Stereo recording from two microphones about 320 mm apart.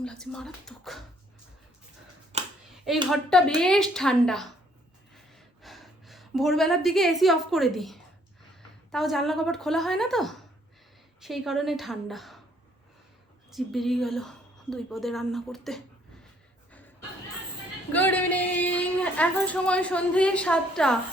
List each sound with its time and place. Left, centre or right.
0.0 s a woman's voice: centre
2.3 s finger snapping: centre
3.1 s a woman's voice: centre
5.1 s gasp: centre
8.9 s a woman's voice: centre
13.5 s a woman's voice: centre
17.9 s a woman's voice: centre